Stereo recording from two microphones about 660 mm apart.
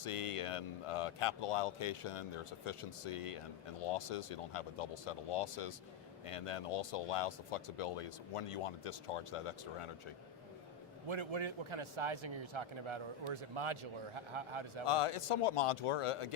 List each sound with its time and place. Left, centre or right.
0.0 s speech: left
11.1 s a man's voice: right
14.8 s speech: left